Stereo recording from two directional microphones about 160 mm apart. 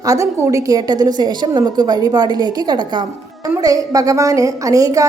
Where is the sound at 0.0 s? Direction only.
20° right (ahead or behind).